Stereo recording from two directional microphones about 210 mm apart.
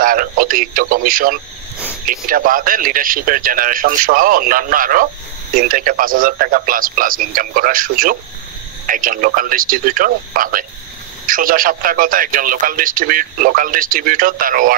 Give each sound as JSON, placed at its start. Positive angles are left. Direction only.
{"t": 0.0, "sound": "a man's voice", "side_deg": -40}